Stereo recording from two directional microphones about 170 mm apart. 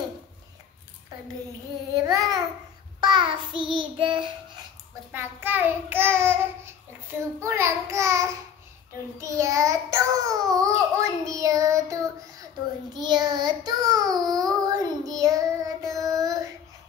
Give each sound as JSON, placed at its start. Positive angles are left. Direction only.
{"t": 2.0, "sound": "babbling", "side_deg": -20}
{"t": 3.0, "sound": "child singing", "side_deg": -25}
{"t": 5.1, "sound": "a child's voice", "side_deg": -10}
{"t": 9.2, "sound": "child singing", "side_deg": -20}